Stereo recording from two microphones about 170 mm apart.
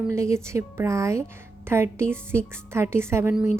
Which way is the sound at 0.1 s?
15° right (ahead or behind).